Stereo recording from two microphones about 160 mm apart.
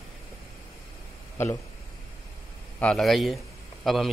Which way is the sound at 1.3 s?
15° left (ahead or behind).